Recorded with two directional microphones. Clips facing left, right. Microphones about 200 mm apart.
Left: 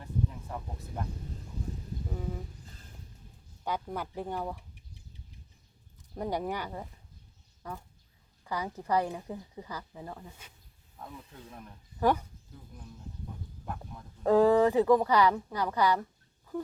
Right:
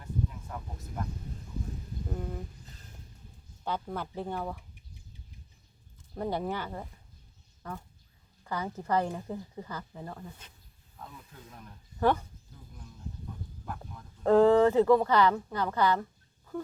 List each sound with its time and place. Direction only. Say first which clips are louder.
2.0 s a sound: right 1 dB; centre (ahead or behind)
3.6 s speech: even; 10° left (ahead or behind)
6.3 s speech: left 2 dB; 15° left (ahead or behind)
11.0 s speech: left 2 dB; 25° left (ahead or behind)
11.6 s speech: right 1 dB; 10° left (ahead or behind)
14.3 s speech: right 2 dB; 15° left (ahead or behind)